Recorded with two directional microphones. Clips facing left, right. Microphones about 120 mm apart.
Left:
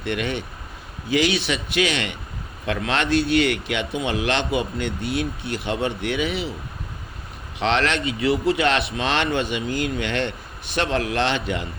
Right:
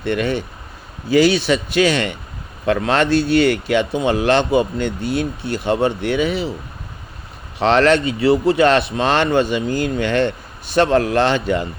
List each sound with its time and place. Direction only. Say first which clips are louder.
0.0 s speech: right 6 dB; 40° right (ahead or behind)
7.6 s speech: right 8 dB; 40° right (ahead or behind)